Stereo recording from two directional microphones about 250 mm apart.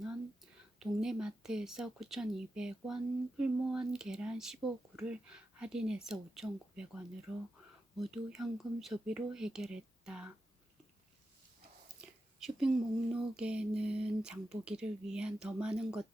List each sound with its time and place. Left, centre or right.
0.8 s speech: centre
11.9 s whispering: centre
13.3 s speech: centre